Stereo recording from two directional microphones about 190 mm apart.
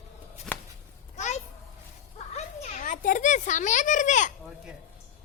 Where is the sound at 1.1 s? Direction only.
40° left (ahead or behind).